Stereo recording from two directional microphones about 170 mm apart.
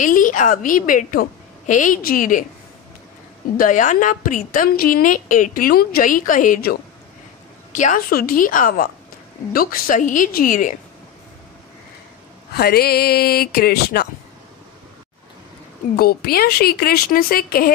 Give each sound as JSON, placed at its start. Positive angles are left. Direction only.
{"t": 0.0, "sound": "a woman's voice", "side_deg": 50}
{"t": 3.5, "sound": "a woman's voice", "side_deg": 50}
{"t": 7.7, "sound": "a woman's voice", "side_deg": 50}
{"t": 12.5, "sound": "speech", "side_deg": 65}
{"t": 16.0, "sound": "speech", "side_deg": 65}